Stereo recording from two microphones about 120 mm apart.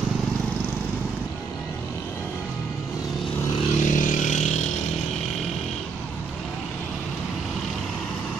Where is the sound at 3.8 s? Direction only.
90° left; by 4.7 s 75° left (ahead or behind).